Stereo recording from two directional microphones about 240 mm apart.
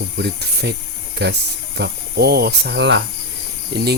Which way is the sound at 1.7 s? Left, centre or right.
Right.